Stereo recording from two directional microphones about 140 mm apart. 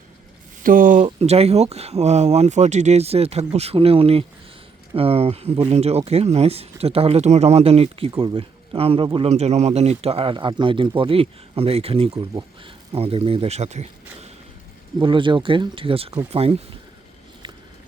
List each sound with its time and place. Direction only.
0.6 s speech: 75° right (ahead or behind)
1.0 s speech: 45° right (ahead or behind)
14.9 s speech: 35° right (ahead or behind)
17.4 s a sound: 35° right (ahead or behind)